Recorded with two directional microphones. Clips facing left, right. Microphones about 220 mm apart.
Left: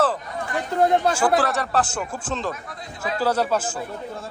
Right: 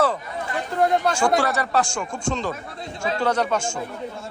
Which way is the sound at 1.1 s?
5° left (ahead or behind).